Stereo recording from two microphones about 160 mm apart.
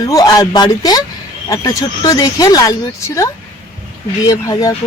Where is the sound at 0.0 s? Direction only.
20° left (ahead or behind).